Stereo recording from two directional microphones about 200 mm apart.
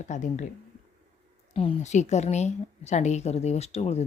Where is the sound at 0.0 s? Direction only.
35° left (ahead or behind).